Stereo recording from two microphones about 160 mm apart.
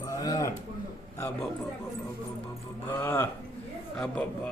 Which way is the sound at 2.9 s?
15° left (ahead or behind).